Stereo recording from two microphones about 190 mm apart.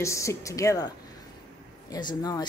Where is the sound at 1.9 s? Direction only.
20° left (ahead or behind).